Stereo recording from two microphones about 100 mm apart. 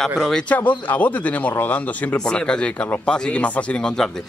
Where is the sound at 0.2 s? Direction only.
5° left (ahead or behind).